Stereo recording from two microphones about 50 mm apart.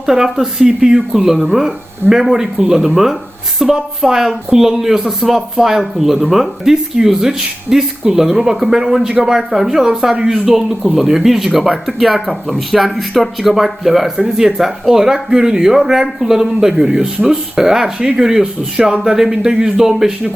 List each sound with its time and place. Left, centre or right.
0.0 s speech: centre